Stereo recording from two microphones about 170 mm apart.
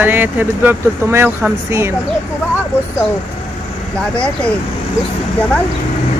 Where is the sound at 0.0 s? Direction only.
10° right (ahead or behind).